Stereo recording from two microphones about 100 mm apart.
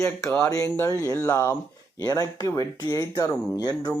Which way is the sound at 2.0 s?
40° left (ahead or behind).